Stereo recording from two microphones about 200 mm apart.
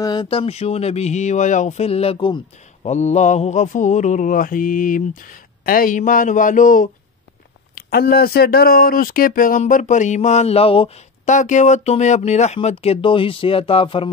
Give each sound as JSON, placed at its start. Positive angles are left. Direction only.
{"t": 0.0, "sound": "speech", "side_deg": 20}
{"t": 2.9, "sound": "speech", "side_deg": 35}